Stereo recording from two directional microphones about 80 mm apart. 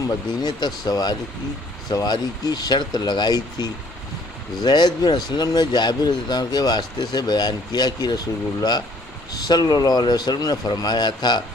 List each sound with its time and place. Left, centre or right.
0.0 s speech: left
9.3 s speech: left